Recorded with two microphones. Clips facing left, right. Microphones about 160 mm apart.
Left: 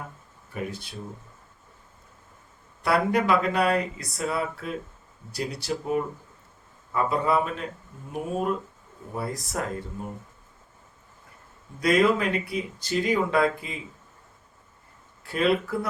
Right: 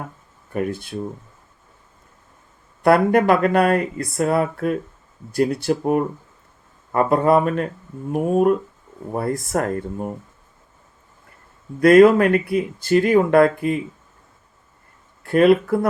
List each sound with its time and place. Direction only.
0.5 s speech: 50° right (ahead or behind)
2.8 s speech: 50° right (ahead or behind)
11.8 s speech: 55° right (ahead or behind)
15.2 s speech: 55° right (ahead or behind)